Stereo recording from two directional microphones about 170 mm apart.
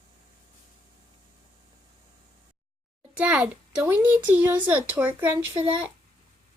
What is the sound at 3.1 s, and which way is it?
A child's voice, 10° right (ahead or behind).